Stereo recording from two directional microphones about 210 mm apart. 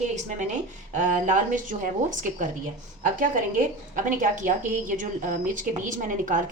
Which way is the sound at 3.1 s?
40° right (ahead or behind).